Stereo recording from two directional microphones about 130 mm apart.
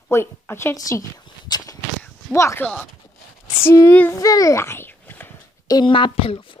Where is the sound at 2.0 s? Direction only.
20° left (ahead or behind).